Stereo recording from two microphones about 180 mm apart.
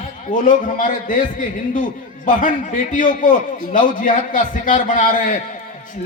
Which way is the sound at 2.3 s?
45° left (ahead or behind).